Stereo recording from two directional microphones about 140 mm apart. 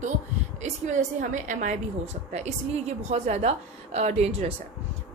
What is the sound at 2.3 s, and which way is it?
A woman's voice, 50° right (ahead or behind).